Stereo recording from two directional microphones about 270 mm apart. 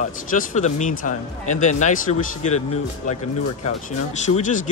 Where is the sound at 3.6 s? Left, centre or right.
Left.